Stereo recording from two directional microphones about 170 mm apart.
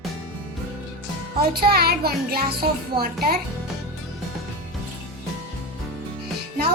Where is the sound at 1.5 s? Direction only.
65° right (ahead or behind).